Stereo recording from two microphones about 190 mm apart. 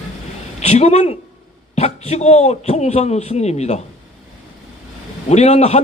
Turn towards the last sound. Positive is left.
turn(degrees=35)  # may be behind; listen again after turning